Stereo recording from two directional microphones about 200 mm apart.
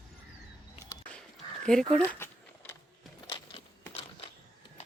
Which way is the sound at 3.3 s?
25° left (ahead or behind).